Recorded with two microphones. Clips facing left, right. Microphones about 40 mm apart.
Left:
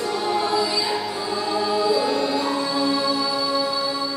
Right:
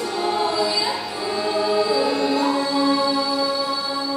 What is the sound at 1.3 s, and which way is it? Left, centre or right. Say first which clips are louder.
Choir: right 2 dB; right.